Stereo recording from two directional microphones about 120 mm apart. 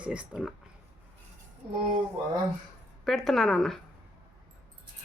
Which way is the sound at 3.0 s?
Centre (ahead or behind).